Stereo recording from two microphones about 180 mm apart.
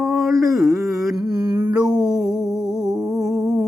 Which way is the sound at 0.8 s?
Centre (ahead or behind).